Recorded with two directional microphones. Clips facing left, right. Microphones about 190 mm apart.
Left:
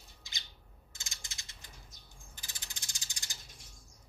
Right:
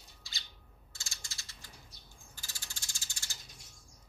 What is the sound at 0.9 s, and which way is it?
Ratchet, 20° left (ahead or behind).